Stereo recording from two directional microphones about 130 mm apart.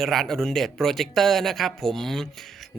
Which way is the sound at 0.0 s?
Centre (ahead or behind).